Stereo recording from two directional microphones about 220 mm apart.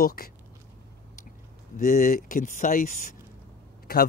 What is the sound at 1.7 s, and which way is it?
Speech, 35° left (ahead or behind).